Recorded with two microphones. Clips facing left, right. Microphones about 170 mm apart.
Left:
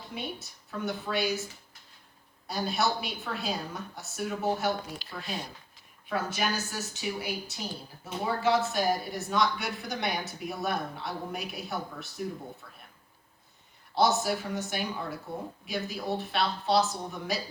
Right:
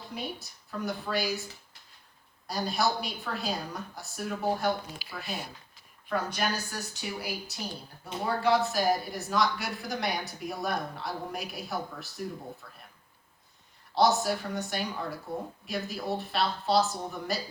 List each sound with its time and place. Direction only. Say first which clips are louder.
0.1 s speech: even; centre (ahead or behind)
2.5 s speech: even; centre (ahead or behind)
13.9 s speech: right 1 dB; centre (ahead or behind)